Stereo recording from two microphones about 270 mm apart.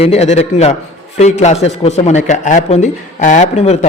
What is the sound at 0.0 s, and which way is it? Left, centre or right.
A man's voice, left.